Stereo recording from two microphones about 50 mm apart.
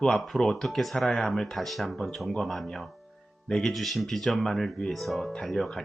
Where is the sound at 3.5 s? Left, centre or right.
Centre.